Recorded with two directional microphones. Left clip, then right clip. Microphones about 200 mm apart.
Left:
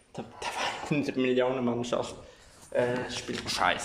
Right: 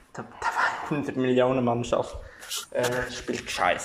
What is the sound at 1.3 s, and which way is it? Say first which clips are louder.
Speech: right 7 dB; 5° right (ahead or behind).